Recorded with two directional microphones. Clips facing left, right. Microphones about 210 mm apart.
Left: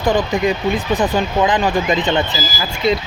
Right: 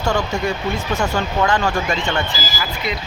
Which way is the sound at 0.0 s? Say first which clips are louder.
Left 4 dB; 20° left (ahead or behind).